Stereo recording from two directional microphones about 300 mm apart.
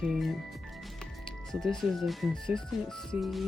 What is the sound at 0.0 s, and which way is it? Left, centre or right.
Speech, centre.